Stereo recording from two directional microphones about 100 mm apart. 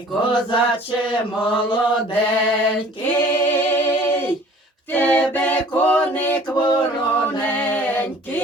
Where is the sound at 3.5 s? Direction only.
20° left (ahead or behind).